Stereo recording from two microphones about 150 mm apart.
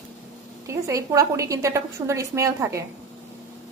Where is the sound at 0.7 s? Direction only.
20° right (ahead or behind).